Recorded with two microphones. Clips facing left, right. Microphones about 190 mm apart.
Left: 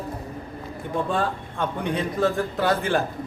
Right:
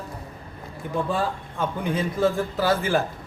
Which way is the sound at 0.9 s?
5° right (ahead or behind).